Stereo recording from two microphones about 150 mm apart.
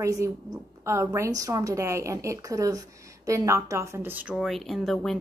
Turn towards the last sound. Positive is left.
turn(degrees=0)  # may be behind; listen again after turning